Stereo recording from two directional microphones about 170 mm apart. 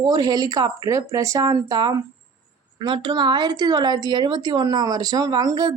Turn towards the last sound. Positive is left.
turn(degrees=-20)  # may be behind; listen again after turning